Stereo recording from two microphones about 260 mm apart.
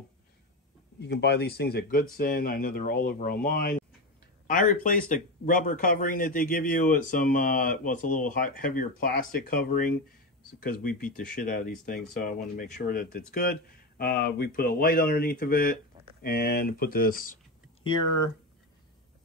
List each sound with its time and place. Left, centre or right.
1.0 s speech: left
17.8 s speech: centre